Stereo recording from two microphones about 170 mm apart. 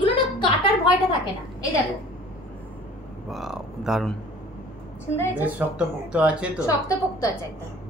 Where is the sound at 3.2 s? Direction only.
Centre (ahead or behind).